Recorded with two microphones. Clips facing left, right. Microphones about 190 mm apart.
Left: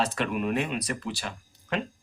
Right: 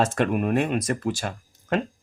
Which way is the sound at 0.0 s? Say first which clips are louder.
Right 5 dB; 45° right (ahead or behind).